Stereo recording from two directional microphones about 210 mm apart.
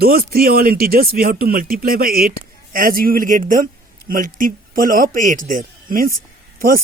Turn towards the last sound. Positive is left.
turn(degrees=-45)  # may be behind; listen again after turning